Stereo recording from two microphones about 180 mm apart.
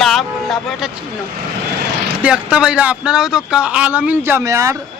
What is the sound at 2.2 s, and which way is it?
Speech, 5° right (ahead or behind).